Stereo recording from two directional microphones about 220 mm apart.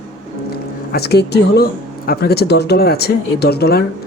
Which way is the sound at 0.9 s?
45° left (ahead or behind).